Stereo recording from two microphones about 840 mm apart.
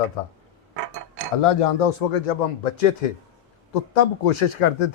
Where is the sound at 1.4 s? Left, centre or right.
Left.